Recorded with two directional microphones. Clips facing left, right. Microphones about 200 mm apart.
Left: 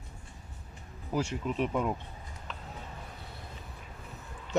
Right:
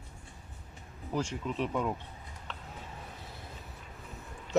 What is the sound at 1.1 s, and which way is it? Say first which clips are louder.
Speech: left 2 dB; 10° left (ahead or behind).